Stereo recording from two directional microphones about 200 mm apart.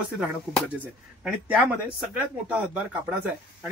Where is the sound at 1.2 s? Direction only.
5° right (ahead or behind).